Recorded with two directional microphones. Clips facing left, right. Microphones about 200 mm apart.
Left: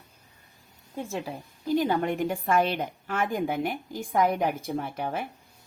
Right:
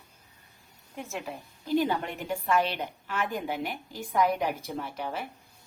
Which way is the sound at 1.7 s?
45° left (ahead or behind).